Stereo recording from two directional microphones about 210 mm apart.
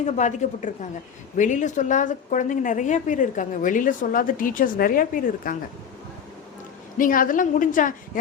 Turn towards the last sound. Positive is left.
turn(degrees=40)  # may be behind; listen again after turning